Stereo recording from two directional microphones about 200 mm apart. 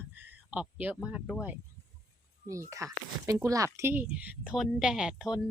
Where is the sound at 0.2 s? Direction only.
5° right (ahead or behind).